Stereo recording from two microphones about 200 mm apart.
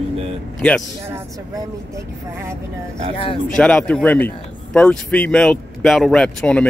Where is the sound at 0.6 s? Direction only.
5° left (ahead or behind).